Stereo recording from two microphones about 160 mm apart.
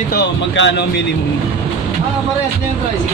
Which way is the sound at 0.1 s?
90° left.